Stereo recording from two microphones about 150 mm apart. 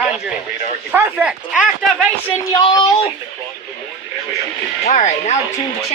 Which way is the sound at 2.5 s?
30° left (ahead or behind).